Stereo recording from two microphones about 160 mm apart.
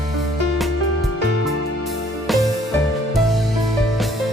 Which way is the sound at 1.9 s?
Centre (ahead or behind).